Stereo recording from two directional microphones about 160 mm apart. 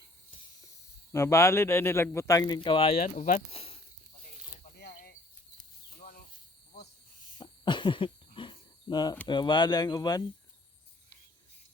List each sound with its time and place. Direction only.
1.1 s speech: 20° left (ahead or behind)
2.6 s speech: 35° left (ahead or behind)
3.2 s speech: 55° left (ahead or behind)
3.5 s speech: 35° left (ahead or behind)
4.6 s a sound: 80° left
7.3 s a sound: 30° left (ahead or behind)
9.2 s speech: 30° left (ahead or behind)